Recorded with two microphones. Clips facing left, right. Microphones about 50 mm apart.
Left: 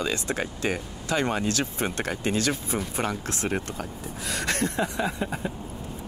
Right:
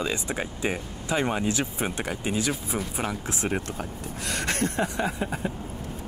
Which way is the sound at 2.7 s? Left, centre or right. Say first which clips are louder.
Left 1 dB; centre.